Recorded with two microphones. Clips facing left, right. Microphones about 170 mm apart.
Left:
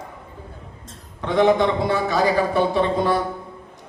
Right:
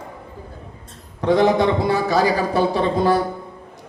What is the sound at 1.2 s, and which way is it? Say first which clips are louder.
A man's voice: right 1 dB; 40° right (ahead or behind).